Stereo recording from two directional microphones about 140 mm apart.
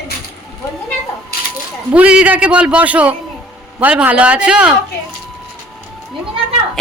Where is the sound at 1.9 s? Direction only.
10° right (ahead or behind).